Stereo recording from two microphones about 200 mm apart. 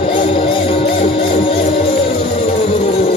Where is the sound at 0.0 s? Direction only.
25° left (ahead or behind).